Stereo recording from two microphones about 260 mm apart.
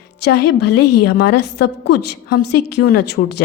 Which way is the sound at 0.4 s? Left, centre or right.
Left.